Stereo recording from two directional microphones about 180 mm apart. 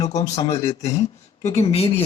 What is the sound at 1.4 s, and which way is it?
Speech, 35° left (ahead or behind).